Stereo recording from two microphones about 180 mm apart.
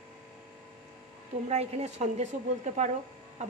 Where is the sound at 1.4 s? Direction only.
40° right (ahead or behind).